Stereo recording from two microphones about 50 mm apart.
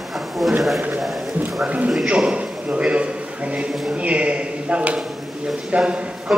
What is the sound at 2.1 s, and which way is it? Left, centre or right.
Speech, centre.